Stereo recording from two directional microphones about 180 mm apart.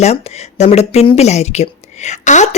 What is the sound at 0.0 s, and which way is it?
Speech, 35° left (ahead or behind).